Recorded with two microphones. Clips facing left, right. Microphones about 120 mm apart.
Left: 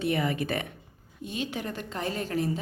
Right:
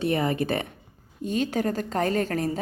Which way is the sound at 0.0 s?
40° right (ahead or behind).